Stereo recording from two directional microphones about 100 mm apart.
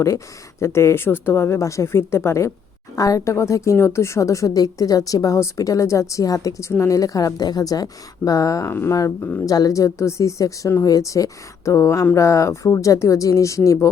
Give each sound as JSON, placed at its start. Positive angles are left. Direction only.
{"t": 0.6, "sound": "speech", "side_deg": 25}